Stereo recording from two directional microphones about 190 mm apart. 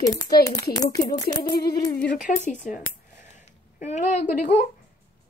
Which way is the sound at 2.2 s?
40° left (ahead or behind).